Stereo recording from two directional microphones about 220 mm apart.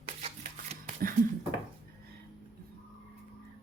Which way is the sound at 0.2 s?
30° right (ahead or behind).